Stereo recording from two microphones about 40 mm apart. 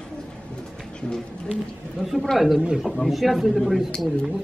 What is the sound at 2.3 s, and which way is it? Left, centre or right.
Speech, centre.